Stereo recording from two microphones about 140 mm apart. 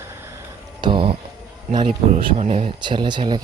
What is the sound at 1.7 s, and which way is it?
Speech, 40° right (ahead or behind).